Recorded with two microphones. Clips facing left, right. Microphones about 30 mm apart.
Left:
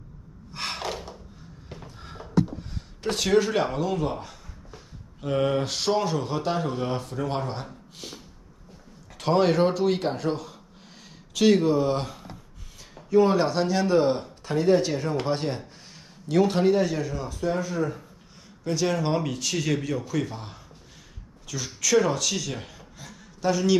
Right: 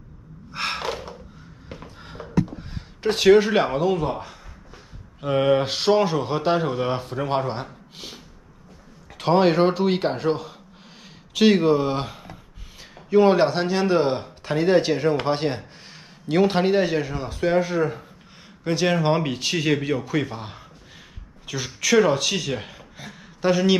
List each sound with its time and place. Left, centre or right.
0.5 s gasp: right
1.7 s a man's voice: right